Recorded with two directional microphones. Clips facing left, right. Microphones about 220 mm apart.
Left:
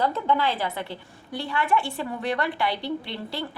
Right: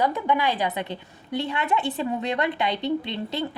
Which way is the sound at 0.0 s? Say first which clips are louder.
Right 1 dB; 15° right (ahead or behind).